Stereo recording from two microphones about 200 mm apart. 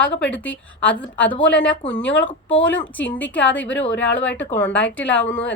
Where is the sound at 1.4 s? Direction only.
10° left (ahead or behind).